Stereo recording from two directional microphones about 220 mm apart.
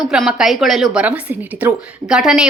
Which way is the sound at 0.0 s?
Centre (ahead or behind).